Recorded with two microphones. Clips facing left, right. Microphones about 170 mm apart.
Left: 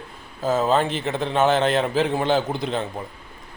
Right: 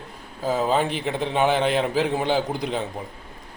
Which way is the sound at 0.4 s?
10° right (ahead or behind).